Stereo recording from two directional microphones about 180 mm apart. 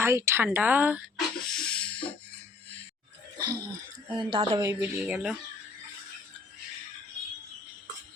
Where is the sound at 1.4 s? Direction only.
5° left (ahead or behind).